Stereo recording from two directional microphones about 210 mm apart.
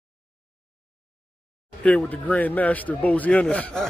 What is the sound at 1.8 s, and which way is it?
A man's voice, 5° left (ahead or behind).